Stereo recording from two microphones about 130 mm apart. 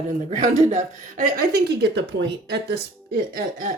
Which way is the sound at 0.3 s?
65° right (ahead or behind).